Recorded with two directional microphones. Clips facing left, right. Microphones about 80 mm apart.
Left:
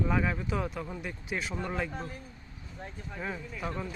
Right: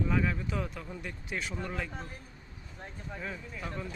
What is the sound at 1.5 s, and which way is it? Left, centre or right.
Speech, centre.